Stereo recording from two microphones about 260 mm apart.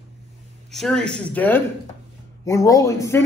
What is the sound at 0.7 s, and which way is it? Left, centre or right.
A woman's voice, centre.